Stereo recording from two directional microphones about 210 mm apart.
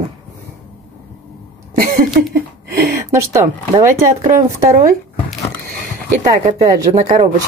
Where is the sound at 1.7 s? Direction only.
45° right (ahead or behind).